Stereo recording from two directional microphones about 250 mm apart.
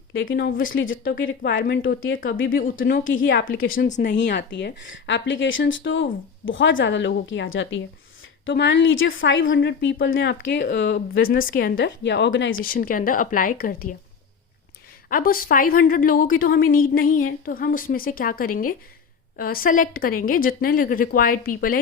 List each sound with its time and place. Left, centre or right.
0.3 s a woman's voice: left
4.0 s a woman's voice: left
11.7 s speech: left
12.5 s a woman's voice: left
15.1 s a woman's voice: left